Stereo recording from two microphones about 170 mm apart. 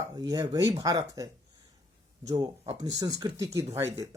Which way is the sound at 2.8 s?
20° right (ahead or behind).